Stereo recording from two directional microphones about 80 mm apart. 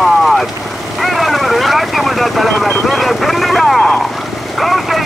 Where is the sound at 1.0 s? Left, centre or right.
Centre.